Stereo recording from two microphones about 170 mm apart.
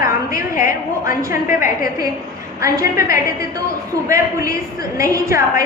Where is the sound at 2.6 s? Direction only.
20° right (ahead or behind).